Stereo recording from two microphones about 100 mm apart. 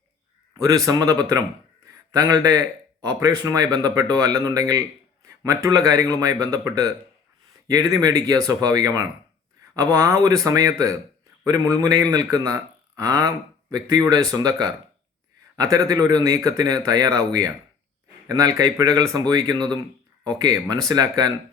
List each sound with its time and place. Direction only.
0.5 s a man's voice: 35° right (ahead or behind)